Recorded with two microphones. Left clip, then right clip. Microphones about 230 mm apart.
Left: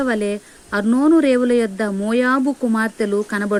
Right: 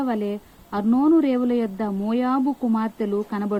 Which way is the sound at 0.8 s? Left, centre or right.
Left.